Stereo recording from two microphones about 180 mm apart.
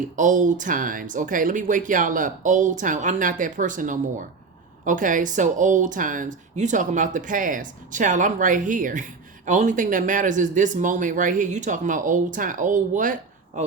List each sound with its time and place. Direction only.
0.2 s speech: 45° right (ahead or behind)